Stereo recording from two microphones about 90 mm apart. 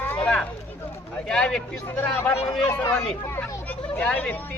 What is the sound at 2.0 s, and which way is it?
Speech, 25° left (ahead or behind).